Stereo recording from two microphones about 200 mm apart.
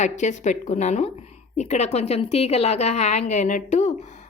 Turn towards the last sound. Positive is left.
turn(degrees=35)  # may be behind; listen again after turning